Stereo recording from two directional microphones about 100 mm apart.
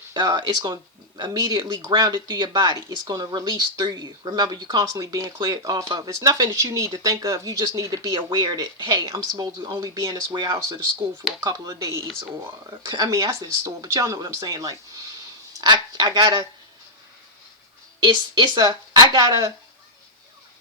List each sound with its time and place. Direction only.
0.1 s speech: 50° right (ahead or behind); by 10.3 s 30° right (ahead or behind)
10.3 s speech: 50° right (ahead or behind)
13.7 s speech: 30° right (ahead or behind)
18.0 s speech: 50° right (ahead or behind)